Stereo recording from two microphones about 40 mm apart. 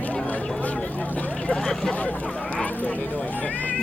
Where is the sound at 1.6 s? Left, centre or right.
Centre.